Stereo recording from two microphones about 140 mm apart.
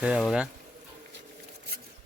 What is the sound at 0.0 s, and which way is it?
Speech, 5° right (ahead or behind).